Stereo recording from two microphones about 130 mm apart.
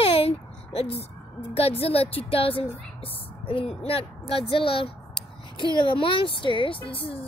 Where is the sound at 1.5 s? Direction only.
50° left (ahead or behind).